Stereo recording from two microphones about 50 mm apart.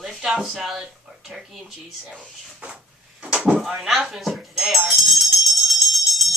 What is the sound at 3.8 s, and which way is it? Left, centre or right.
Music, centre.